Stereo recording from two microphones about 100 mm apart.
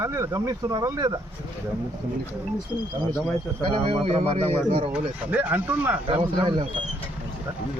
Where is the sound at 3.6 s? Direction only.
65° right (ahead or behind).